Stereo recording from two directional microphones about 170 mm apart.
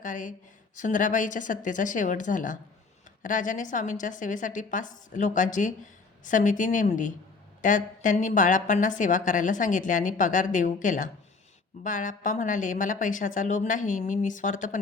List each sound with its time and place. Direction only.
0.0 s a woman's voice: 50° left (ahead or behind)